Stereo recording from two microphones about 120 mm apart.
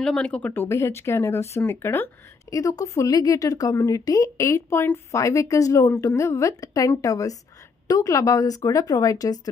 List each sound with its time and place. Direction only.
0.0 s speech: 5° left (ahead or behind)
0.5 s a woman's voice: 20° left (ahead or behind)